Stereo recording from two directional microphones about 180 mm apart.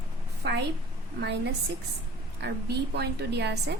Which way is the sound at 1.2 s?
70° right (ahead or behind).